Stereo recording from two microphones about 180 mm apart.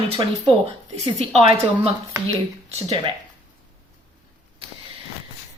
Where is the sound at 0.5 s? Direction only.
30° right (ahead or behind).